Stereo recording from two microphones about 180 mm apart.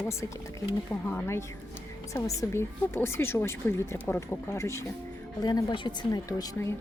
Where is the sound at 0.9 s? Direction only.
10° left (ahead or behind).